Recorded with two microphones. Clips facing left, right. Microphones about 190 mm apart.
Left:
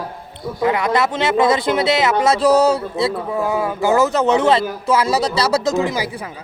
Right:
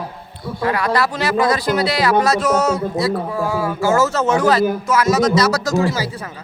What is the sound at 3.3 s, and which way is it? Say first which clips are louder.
Speech: left 1 dB; 20° left (ahead or behind).